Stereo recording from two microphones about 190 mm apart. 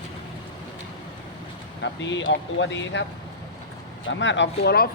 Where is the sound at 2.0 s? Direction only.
75° left (ahead or behind).